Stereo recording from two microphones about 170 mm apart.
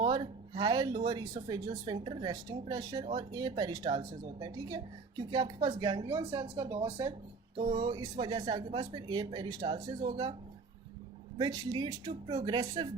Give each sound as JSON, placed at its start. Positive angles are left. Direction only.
{"t": 0.0, "sound": "speech", "side_deg": -25}
{"t": 6.3, "sound": "speech", "side_deg": -30}
{"t": 11.3, "sound": "speech", "side_deg": -25}